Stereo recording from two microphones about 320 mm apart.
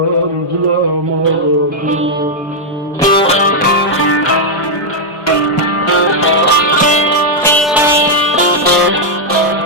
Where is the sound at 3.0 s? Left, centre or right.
Centre.